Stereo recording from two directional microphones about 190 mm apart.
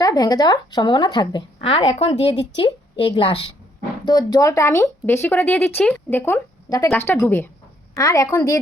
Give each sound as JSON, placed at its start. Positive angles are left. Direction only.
{"t": 0.0, "sound": "a woman's voice", "side_deg": 20}